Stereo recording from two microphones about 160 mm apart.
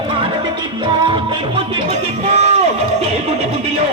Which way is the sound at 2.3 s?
40° right (ahead or behind).